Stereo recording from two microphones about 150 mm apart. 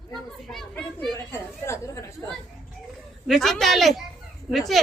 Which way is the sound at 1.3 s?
15° left (ahead or behind).